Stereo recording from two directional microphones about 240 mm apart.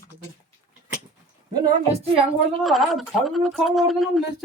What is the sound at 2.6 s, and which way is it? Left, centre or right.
Speech, centre.